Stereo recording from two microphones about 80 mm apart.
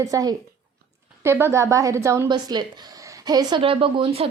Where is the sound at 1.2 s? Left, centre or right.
Right.